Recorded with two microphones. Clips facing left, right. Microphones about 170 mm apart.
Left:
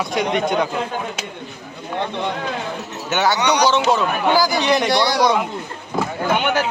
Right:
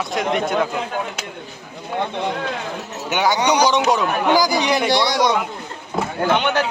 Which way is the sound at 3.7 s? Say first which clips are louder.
Even; 15° right (ahead or behind).